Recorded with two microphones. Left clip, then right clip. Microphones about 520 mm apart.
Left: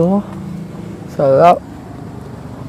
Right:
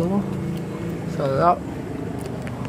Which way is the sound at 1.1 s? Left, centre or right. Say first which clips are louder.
Left 10 dB; left.